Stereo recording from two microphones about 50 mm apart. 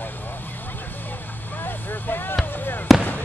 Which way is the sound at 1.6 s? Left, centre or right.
Left.